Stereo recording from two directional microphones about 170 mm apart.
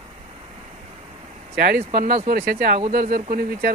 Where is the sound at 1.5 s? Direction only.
65° right (ahead or behind).